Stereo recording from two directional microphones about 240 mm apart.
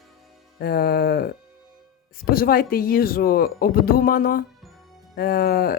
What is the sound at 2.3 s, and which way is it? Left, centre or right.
Speech, left.